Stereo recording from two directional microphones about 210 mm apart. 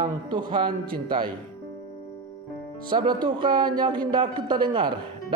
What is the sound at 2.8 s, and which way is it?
Speech, 20° right (ahead or behind).